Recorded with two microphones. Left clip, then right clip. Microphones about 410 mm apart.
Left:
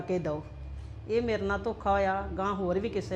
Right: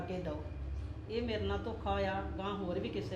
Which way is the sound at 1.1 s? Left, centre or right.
Left.